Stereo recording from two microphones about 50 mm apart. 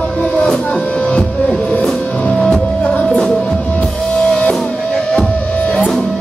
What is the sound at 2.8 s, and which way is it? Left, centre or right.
Music, left.